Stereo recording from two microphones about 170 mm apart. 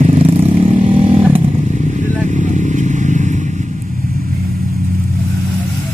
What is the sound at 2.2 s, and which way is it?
Vehicle, 45° right (ahead or behind).